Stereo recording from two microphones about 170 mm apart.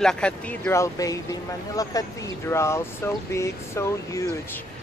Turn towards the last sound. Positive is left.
turn(degrees=15)  # may be behind; listen again after turning